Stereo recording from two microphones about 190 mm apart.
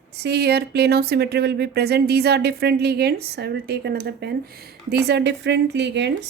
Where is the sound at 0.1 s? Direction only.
60° right (ahead or behind).